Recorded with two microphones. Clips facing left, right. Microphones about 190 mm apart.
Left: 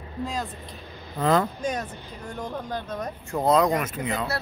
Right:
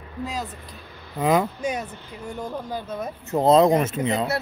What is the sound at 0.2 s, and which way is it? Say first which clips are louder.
Speech: even; centre (ahead or behind).